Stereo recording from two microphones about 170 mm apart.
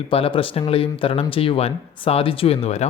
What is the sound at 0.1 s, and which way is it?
Speech, 30° left (ahead or behind).